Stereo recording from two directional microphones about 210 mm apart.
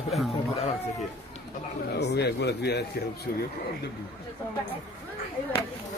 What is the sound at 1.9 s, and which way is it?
Speech, 50° left (ahead or behind).